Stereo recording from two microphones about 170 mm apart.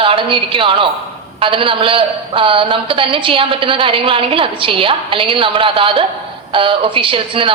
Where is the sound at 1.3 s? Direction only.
30° right (ahead or behind).